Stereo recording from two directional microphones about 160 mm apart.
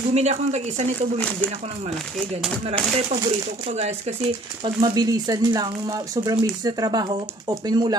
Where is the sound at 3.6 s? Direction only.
45° right (ahead or behind).